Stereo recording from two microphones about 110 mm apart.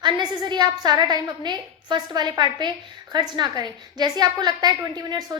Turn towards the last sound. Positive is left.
turn(degrees=-35)  # may be behind; listen again after turning